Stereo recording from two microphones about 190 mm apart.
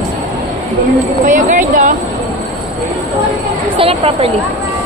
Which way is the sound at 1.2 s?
45° right (ahead or behind).